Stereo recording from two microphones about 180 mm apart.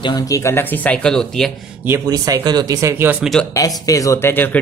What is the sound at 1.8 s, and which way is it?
Speech, 15° right (ahead or behind).